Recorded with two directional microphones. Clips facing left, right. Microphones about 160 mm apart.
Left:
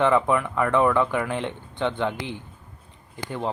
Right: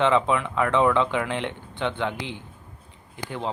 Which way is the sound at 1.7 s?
15° left (ahead or behind).